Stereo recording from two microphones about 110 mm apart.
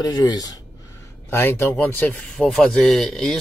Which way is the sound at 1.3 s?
25° left (ahead or behind).